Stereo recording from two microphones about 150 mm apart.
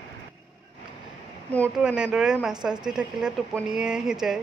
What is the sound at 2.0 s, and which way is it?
A woman's voice, 5° right (ahead or behind).